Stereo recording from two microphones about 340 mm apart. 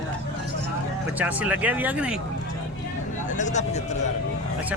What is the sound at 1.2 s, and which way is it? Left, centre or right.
Speech, centre.